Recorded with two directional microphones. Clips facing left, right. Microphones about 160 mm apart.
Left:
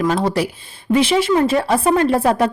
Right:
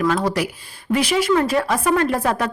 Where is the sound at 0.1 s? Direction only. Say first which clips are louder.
Left 2 dB; 30° left (ahead or behind).